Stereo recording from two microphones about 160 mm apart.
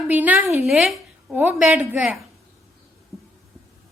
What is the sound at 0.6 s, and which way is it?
A woman's voice, centre (ahead or behind).